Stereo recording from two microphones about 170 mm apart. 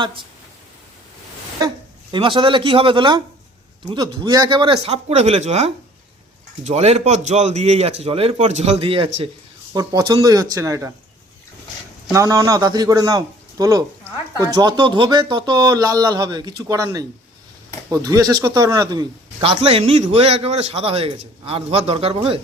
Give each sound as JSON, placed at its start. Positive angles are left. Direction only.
{"t": 0.0, "sound": "speech", "side_deg": -30}
{"t": 2.1, "sound": "speech", "side_deg": -30}
{"t": 12.1, "sound": "speech", "side_deg": -20}